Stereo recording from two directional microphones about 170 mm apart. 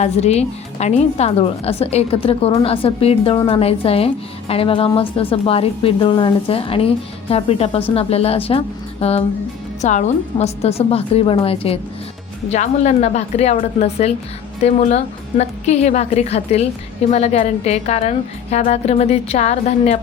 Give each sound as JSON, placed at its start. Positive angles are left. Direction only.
{"t": 0.0, "sound": "a woman's voice", "side_deg": 40}